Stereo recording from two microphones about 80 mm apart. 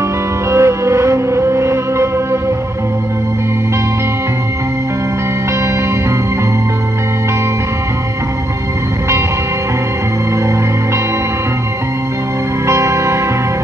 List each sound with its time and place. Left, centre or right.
0.5 s music: right
12.6 s music: right